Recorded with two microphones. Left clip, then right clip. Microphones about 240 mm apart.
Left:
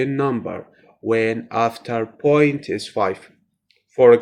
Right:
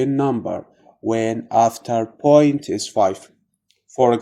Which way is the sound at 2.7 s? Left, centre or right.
Right.